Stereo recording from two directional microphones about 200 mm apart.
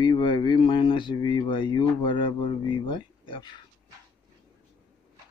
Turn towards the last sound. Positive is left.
turn(degrees=25)  # may be behind; listen again after turning